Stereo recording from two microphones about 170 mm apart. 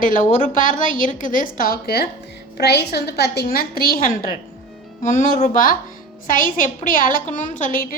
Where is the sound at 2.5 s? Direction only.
75° left (ahead or behind).